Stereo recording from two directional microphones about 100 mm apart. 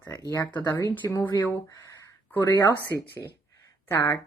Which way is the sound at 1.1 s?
30° left (ahead or behind).